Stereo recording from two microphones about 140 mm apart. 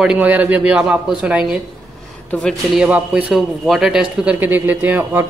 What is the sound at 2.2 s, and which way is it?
Speech, 10° left (ahead or behind).